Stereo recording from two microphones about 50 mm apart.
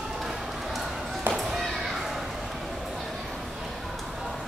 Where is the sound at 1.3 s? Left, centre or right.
Right.